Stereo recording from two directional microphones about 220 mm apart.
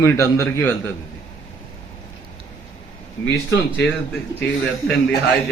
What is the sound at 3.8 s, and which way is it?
Speech, centre (ahead or behind).